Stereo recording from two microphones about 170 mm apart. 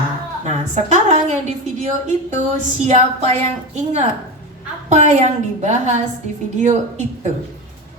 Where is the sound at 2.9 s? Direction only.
40° right (ahead or behind).